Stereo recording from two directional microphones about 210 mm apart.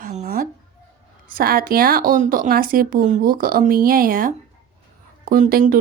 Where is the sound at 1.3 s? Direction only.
45° right (ahead or behind).